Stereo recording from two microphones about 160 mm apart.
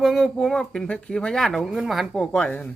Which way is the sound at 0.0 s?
Centre (ahead or behind).